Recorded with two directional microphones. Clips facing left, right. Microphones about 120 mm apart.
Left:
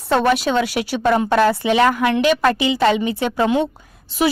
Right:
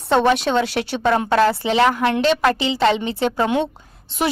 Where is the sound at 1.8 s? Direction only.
25° right (ahead or behind).